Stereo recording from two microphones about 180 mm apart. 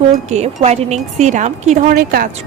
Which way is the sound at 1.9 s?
55° right (ahead or behind).